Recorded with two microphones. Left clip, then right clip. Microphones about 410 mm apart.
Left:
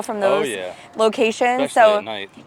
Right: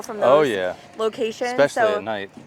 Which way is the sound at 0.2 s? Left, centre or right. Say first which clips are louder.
Right 3 dB; right.